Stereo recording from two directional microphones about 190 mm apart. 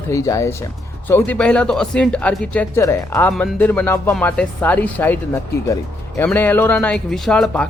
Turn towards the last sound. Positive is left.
turn(degrees=5)  # may be behind; listen again after turning